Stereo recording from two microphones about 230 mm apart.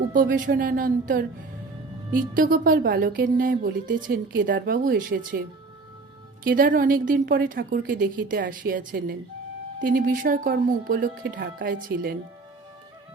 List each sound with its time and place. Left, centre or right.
0.1 s speech: right
6.4 s speech: right